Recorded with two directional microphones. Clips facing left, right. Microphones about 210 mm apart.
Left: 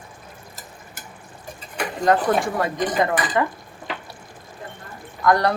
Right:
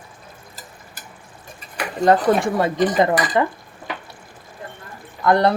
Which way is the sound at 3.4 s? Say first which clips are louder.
Right 2 dB; 25° right (ahead or behind).